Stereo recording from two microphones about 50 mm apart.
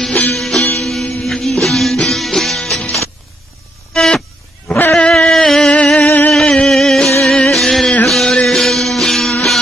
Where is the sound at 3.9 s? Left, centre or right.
Centre.